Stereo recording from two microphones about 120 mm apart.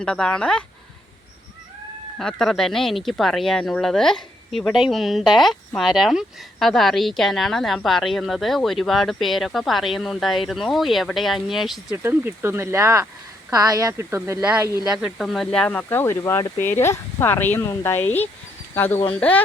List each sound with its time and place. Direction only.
0.0 s speech: 5° left (ahead or behind)
2.1 s speech: 5° left (ahead or behind)
12.0 s speech: 20° right (ahead or behind)
14.4 s speech: 10° right (ahead or behind); by 19.4 s 10° left (ahead or behind)